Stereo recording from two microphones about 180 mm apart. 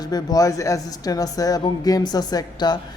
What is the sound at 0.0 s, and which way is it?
Speech, 20° left (ahead or behind).